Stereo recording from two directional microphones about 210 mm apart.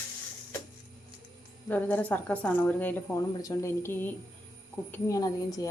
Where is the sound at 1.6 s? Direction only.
10° left (ahead or behind).